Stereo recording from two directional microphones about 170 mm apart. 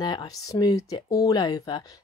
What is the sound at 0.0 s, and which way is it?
Speech, 25° left (ahead or behind).